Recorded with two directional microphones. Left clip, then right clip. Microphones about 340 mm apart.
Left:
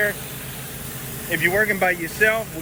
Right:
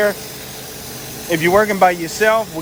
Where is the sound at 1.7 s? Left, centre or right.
Centre.